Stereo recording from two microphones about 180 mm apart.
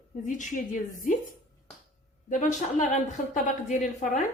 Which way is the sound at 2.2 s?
45° left (ahead or behind).